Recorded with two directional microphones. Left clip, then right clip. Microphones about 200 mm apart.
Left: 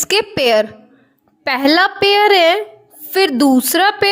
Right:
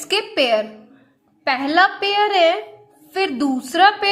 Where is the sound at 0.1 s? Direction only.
40° left (ahead or behind).